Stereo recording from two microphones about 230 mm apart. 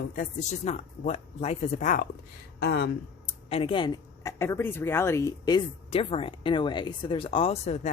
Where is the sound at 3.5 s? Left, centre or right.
Left.